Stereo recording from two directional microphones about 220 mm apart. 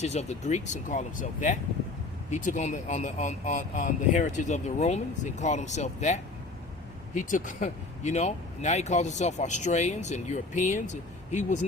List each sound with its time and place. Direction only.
0.0 s speech: 30° left (ahead or behind)